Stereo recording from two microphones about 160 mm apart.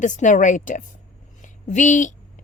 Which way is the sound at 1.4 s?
50° left (ahead or behind).